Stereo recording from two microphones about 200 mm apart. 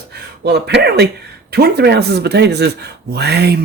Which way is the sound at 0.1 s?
55° right (ahead or behind).